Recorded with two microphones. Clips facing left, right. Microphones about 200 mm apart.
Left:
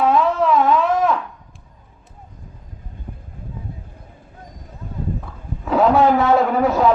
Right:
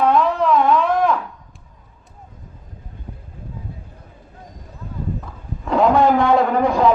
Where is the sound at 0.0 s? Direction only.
5° left (ahead or behind).